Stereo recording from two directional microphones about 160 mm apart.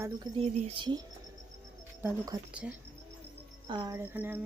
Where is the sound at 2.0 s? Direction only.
20° right (ahead or behind).